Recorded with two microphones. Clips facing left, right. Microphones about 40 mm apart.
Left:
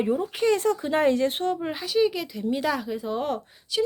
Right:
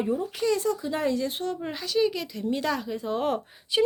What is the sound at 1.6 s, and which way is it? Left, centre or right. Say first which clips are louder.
Speech: even; centre.